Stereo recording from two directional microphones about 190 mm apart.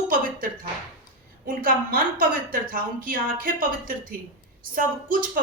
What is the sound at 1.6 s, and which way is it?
A woman's voice, 50° right (ahead or behind).